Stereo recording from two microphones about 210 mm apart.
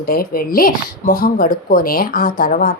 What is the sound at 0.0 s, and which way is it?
Speech, 45° left (ahead or behind).